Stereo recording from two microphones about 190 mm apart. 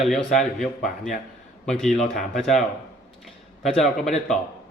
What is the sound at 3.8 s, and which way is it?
Speech, centre (ahead or behind).